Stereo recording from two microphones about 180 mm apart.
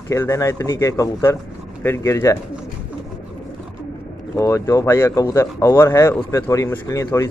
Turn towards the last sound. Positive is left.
turn(degrees=15)  # may be behind; listen again after turning